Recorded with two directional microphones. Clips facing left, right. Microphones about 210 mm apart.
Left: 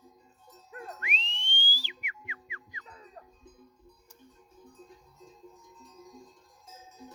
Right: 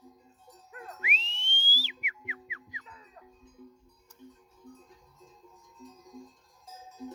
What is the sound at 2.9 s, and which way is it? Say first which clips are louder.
Livestock: left 3 dB; 40° left (ahead or behind).